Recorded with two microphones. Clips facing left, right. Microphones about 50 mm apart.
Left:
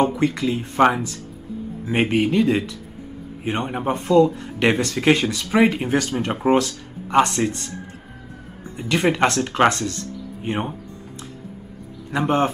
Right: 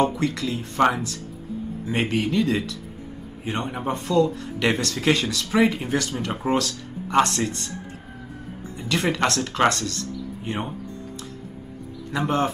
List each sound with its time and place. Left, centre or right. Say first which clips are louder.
0.2 s speech: left 4 dB; left
8.7 s speech: left 4 dB; left